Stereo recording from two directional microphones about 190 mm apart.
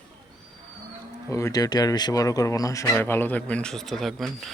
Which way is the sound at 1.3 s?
20° left (ahead or behind).